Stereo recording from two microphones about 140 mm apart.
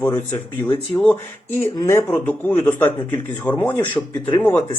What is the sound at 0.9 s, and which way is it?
A man's voice, 15° left (ahead or behind).